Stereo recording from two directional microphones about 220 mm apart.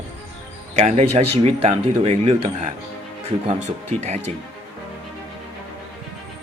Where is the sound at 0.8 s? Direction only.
30° right (ahead or behind).